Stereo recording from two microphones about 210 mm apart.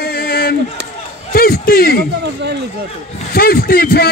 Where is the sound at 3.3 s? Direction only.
45° left (ahead or behind).